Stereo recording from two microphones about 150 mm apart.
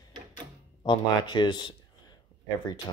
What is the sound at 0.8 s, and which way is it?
Speech, 30° left (ahead or behind).